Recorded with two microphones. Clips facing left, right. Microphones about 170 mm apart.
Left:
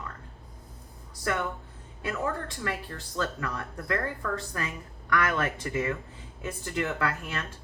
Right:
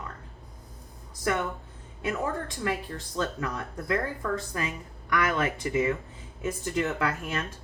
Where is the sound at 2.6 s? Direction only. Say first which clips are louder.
Right 3 dB; 20° right (ahead or behind).